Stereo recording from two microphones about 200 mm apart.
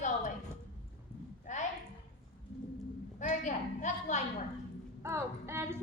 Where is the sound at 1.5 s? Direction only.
35° left (ahead or behind).